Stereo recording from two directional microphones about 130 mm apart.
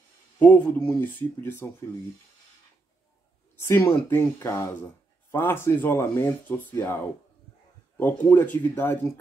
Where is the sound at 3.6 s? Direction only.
20° left (ahead or behind).